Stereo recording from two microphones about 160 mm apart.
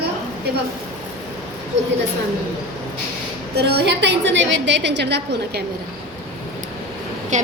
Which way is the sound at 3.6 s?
90° right.